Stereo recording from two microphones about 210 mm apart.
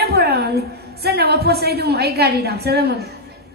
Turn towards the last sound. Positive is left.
turn(degrees=-50)  # may be behind; listen again after turning